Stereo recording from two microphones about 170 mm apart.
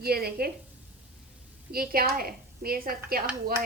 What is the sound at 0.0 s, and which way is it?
Speech, 65° right (ahead or behind).